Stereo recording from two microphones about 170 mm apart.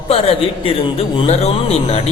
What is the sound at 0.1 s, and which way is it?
A man's voice, 35° left (ahead or behind).